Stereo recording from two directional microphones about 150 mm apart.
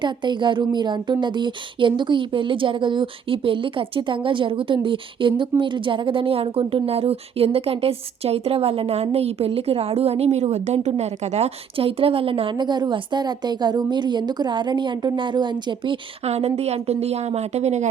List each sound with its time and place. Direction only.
0.0 s a woman's voice: 30° right (ahead or behind); by 17.8 s 50° right (ahead or behind)